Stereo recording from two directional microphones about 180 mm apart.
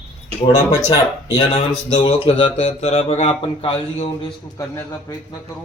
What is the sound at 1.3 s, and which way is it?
Speech, 35° left (ahead or behind).